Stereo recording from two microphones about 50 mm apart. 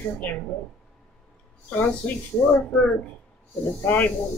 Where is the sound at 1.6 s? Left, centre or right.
Left.